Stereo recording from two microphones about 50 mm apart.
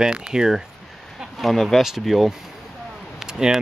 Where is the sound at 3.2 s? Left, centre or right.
Centre.